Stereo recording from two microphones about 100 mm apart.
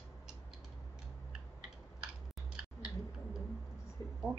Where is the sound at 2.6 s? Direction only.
5° right (ahead or behind).